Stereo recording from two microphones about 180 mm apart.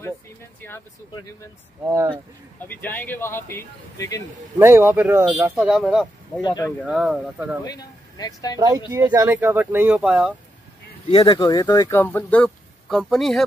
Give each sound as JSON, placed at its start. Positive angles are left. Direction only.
{"t": 0.6, "sound": "speech", "side_deg": 15}
{"t": 2.7, "sound": "speech", "side_deg": 10}
{"t": 4.6, "sound": "speech", "side_deg": -15}
{"t": 6.4, "sound": "speech", "side_deg": 25}
{"t": 6.9, "sound": "speech", "side_deg": -5}
{"t": 7.6, "sound": "speech", "side_deg": 20}
{"t": 8.5, "sound": "speech", "side_deg": -20}
{"t": 11.1, "sound": "speech", "side_deg": 35}
{"t": 11.3, "sound": "speech", "side_deg": 20}